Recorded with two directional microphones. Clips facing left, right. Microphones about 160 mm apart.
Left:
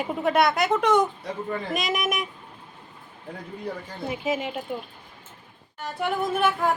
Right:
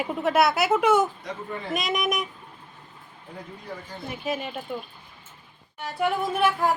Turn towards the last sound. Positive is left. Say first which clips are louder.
# even
turn(degrees=0)  # may be behind; listen again after turning